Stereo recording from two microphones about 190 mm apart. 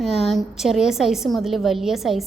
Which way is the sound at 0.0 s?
Centre (ahead or behind).